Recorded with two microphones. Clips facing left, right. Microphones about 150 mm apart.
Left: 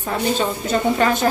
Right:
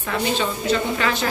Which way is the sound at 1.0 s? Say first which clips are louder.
Left 5 dB; 50° left (ahead or behind).